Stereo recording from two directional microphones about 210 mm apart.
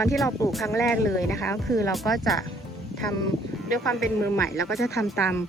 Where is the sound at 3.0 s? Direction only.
15° left (ahead or behind).